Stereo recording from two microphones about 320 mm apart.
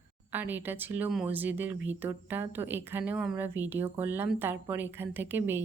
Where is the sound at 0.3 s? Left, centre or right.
Centre.